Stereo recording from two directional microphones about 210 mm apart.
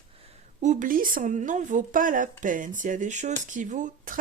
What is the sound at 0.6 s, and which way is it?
Speech, 35° right (ahead or behind).